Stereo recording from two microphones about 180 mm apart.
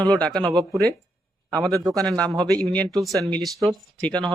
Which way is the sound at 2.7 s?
5° left (ahead or behind).